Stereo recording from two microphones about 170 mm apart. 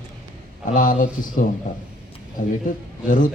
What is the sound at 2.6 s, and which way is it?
Speech, 55° left (ahead or behind).